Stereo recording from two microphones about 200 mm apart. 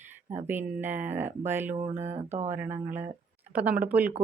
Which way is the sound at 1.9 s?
35° right (ahead or behind).